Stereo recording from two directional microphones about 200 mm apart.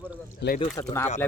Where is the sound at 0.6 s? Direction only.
15° left (ahead or behind).